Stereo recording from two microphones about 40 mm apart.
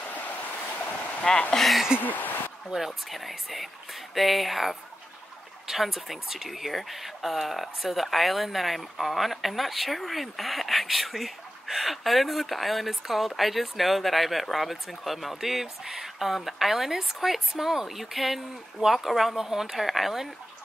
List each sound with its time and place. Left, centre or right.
0.1 s waves: left
1.3 s speech: centre
2.0 s a sound: left
2.7 s speech: centre